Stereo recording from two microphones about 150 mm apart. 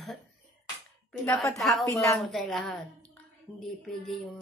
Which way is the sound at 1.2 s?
10° left (ahead or behind).